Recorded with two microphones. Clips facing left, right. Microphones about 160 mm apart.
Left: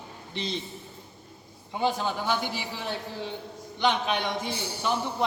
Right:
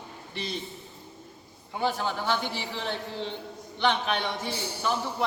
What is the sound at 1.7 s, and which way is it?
A man's voice, 15° left (ahead or behind).